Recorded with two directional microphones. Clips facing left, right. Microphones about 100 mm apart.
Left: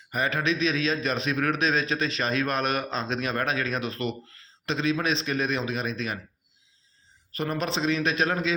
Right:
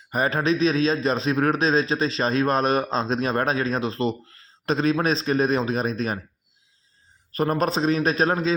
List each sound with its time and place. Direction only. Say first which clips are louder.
0.1 s a man's voice: right 4 dB; 35° right (ahead or behind)
7.3 s a man's voice: right 6 dB; 45° right (ahead or behind)